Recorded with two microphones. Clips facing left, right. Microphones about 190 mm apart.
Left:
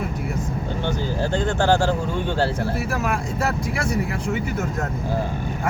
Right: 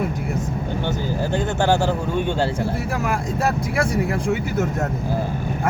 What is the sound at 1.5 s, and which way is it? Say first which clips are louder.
Speech: left 1 dB; 20° right (ahead or behind).